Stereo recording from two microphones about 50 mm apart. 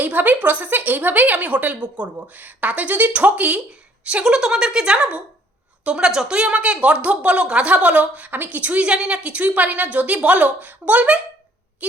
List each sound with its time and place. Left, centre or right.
0.0 s a woman's voice: right
4.2 s speech: centre